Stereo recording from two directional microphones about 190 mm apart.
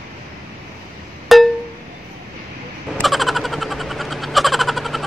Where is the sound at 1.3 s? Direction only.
Centre (ahead or behind).